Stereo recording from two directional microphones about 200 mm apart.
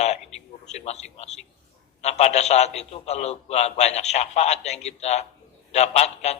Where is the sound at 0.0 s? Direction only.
35° left (ahead or behind).